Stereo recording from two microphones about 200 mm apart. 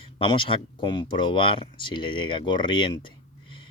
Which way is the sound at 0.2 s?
25° left (ahead or behind).